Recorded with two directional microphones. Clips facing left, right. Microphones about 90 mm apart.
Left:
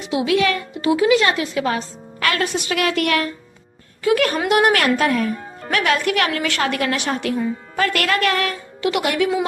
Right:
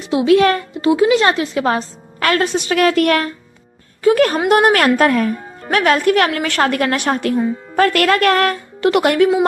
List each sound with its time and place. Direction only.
0.1 s a woman's voice: 35° right (ahead or behind)
0.9 s a woman's voice: 30° right (ahead or behind); by 9.3 s 50° right (ahead or behind)